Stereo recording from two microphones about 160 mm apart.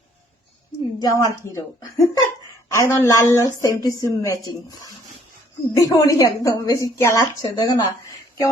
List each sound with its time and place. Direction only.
1.0 s a woman's voice: 20° left (ahead or behind)
5.7 s a woman's voice: 20° left (ahead or behind)